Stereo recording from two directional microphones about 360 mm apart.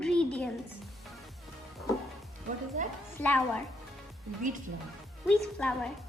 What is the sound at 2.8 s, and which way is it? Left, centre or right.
Speech, centre.